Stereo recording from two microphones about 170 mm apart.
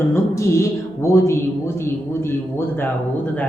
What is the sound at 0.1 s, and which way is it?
A man's voice, 15° left (ahead or behind).